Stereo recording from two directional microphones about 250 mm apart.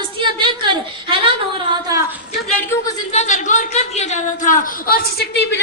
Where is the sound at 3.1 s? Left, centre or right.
Left.